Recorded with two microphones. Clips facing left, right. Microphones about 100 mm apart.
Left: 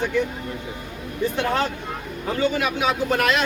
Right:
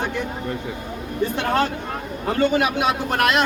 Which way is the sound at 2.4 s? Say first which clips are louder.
Right 3 dB; 60° right (ahead or behind).